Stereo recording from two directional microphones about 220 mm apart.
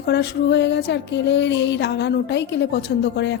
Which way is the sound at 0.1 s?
50° left (ahead or behind).